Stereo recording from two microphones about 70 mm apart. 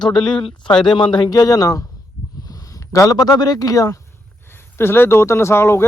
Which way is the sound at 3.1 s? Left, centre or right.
Left.